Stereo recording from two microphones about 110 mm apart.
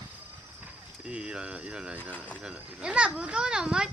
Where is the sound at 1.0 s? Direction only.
10° right (ahead or behind).